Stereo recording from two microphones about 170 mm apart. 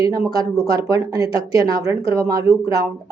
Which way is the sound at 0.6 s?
20° right (ahead or behind).